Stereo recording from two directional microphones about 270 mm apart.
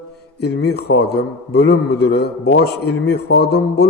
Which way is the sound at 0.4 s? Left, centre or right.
Left.